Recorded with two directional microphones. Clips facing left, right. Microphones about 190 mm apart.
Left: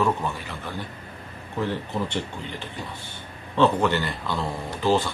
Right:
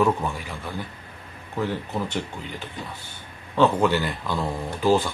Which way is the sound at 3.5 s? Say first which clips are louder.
Right 1 dB; 10° right (ahead or behind).